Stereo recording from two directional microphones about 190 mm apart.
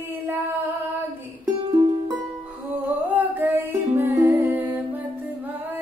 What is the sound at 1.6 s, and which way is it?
Music, 25° right (ahead or behind).